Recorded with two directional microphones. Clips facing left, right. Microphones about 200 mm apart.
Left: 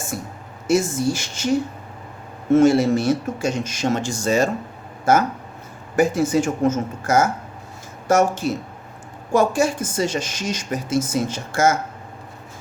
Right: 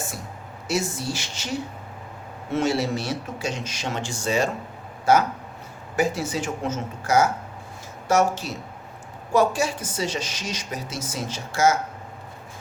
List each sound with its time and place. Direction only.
0.7 s speech: 50° left (ahead or behind)
2.5 s speech: 50° left (ahead or behind)
6.0 s speech: 50° left (ahead or behind)